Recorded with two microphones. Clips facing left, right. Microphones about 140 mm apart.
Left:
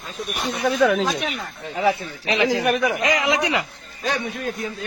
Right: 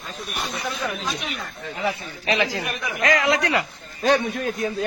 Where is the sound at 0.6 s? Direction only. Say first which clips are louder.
Left 14 dB; 65° left (ahead or behind).